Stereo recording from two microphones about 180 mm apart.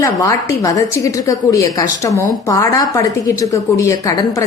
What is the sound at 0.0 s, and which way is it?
A woman's voice, 20° left (ahead or behind).